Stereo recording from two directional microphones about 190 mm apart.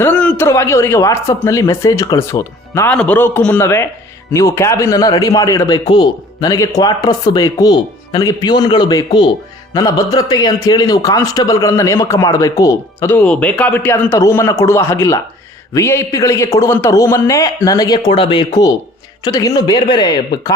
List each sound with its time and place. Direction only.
0.0 s a man's voice: 5° left (ahead or behind)
10.2 s a man's voice: 20° left (ahead or behind)